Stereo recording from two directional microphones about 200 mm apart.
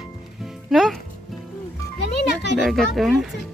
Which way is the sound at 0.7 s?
Centre (ahead or behind).